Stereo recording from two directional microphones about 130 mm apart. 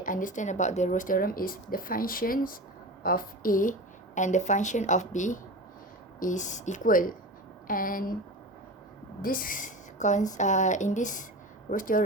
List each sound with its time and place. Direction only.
0.0 s speech: 90° left
9.2 s a woman's voice: 90° left
11.7 s speech: 90° left